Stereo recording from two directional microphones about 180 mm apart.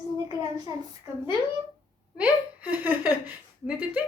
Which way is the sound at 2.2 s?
10° right (ahead or behind).